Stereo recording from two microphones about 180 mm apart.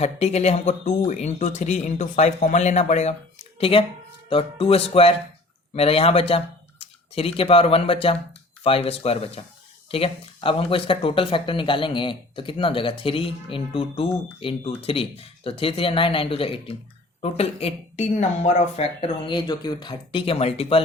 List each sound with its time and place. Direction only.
0.0 s speech: 35° left (ahead or behind)